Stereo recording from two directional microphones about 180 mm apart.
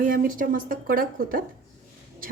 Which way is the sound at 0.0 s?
50° right (ahead or behind).